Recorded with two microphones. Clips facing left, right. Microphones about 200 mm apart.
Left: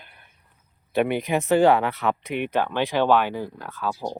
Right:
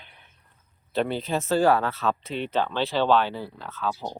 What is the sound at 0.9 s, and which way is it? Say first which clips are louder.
Speech: left 4 dB; 15° left (ahead or behind).